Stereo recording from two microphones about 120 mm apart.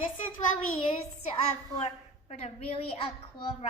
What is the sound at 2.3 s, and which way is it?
Speech, 65° left (ahead or behind).